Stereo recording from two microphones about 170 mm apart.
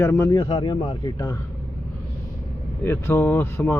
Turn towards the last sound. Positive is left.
turn(degrees=15)  # may be behind; listen again after turning